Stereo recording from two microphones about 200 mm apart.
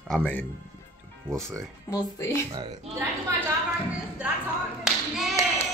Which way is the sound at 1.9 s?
15° left (ahead or behind).